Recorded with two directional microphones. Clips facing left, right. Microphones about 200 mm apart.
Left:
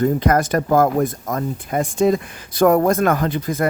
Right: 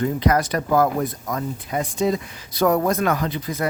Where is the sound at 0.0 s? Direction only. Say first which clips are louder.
Left 3 dB; 45° left (ahead or behind).